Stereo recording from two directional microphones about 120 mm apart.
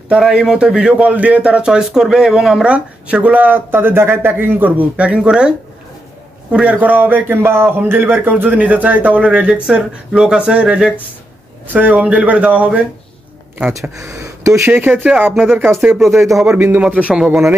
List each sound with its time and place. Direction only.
0.1 s a man's voice: 5° right (ahead or behind)
6.5 s a man's voice: 10° right (ahead or behind)
13.9 s speech: 25° right (ahead or behind)
14.7 s a man's voice: 15° right (ahead or behind)
15.7 s a man's voice: centre (ahead or behind)